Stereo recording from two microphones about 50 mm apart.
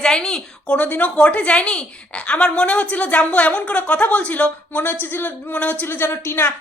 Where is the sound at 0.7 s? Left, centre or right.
Left.